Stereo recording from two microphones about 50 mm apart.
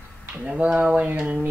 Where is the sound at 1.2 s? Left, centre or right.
Right.